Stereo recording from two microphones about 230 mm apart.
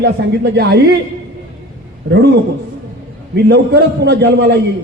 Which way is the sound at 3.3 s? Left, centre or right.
Right.